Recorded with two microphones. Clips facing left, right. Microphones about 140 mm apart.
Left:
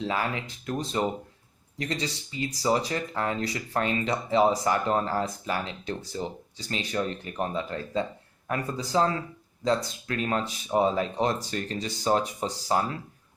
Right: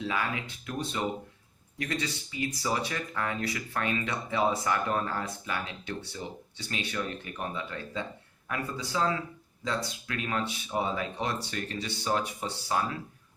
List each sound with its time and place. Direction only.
0.0 s speech: 35° left (ahead or behind)